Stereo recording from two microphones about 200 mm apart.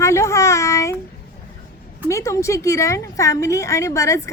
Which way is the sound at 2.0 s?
15° left (ahead or behind).